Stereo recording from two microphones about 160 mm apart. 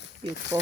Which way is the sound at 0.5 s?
20° right (ahead or behind).